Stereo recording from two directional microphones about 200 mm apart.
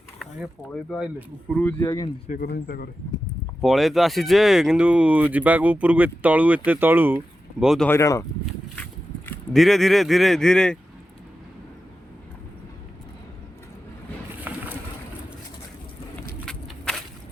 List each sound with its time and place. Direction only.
0.7 s speech: centre (ahead or behind)
1.6 s speech: 15° left (ahead or behind)
2.2 s speech: 55° left (ahead or behind)
3.6 s speech: centre (ahead or behind)
7.9 s speech: 15° left (ahead or behind)
14.4 s pigeon: 10° right (ahead or behind)
16.5 s a sound: centre (ahead or behind)